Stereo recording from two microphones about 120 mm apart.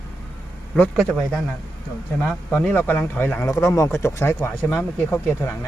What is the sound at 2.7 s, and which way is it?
Speech, 15° left (ahead or behind).